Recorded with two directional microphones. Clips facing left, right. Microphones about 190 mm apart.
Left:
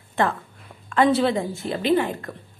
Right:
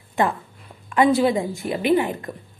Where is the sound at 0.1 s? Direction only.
20° right (ahead or behind).